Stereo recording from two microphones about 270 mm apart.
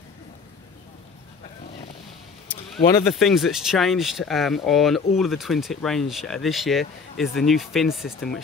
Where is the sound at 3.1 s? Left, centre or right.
Centre.